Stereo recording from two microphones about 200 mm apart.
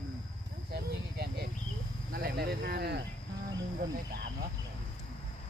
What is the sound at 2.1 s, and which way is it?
Speech, 50° right (ahead or behind).